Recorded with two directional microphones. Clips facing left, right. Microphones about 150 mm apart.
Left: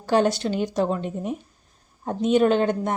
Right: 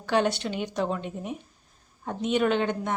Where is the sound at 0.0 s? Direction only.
40° left (ahead or behind).